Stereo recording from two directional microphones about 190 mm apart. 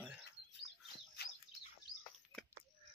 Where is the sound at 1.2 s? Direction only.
55° left (ahead or behind).